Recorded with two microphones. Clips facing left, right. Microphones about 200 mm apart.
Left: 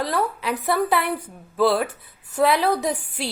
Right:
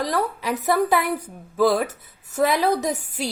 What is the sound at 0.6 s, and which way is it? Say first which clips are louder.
A woman's voice: right 2 dB; 45° right (ahead or behind).